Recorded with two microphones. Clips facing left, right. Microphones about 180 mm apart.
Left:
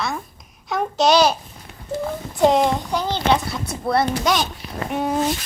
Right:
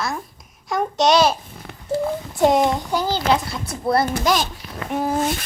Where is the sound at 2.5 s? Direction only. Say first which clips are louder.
Even; centre (ahead or behind).